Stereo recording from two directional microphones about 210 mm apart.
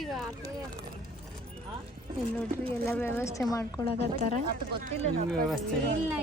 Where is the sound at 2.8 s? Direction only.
10° left (ahead or behind).